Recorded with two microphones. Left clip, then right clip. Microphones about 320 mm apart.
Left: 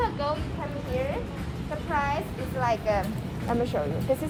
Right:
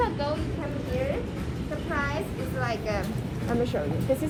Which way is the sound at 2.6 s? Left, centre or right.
Left.